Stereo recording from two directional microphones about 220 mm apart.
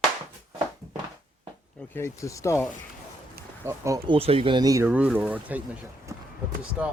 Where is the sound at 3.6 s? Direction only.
15° right (ahead or behind).